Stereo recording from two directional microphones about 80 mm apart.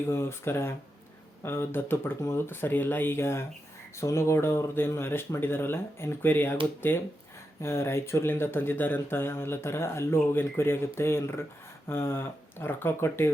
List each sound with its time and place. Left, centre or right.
0.0 s speech: left
7.6 s speech: left